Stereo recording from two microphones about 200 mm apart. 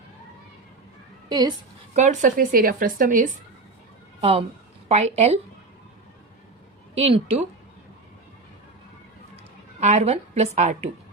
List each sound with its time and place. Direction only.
1.3 s speech: 20° right (ahead or behind)
2.0 s speech: 40° right (ahead or behind)
4.2 s a woman's voice: 30° right (ahead or behind)
6.9 s a woman's voice: 30° right (ahead or behind)
9.8 s a woman's voice: 35° right (ahead or behind)